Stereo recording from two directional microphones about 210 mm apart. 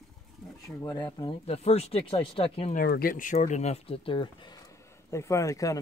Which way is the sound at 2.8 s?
45° left (ahead or behind).